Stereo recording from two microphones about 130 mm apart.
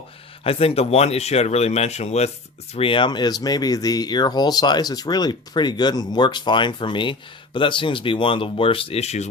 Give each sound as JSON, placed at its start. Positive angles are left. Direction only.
{"t": 0.4, "sound": "speech", "side_deg": 50}
{"t": 2.7, "sound": "speech", "side_deg": 40}